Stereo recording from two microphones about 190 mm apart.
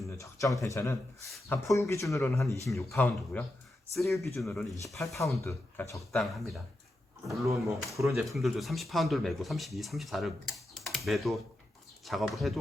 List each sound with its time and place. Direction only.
0.2 s speech: 15° left (ahead or behind); by 5.2 s centre (ahead or behind)
5.4 s speech: 15° left (ahead or behind)
6.0 s speech: centre (ahead or behind)
7.4 s speech: 15° right (ahead or behind)
8.2 s speech: centre (ahead or behind)